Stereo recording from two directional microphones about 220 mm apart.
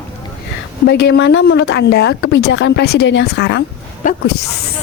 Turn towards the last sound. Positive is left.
turn(degrees=50)  # may be behind; listen again after turning